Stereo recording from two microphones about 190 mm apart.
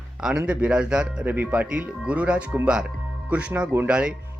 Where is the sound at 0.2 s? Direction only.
5° right (ahead or behind).